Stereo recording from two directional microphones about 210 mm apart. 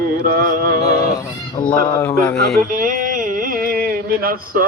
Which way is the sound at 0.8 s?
50° left (ahead or behind).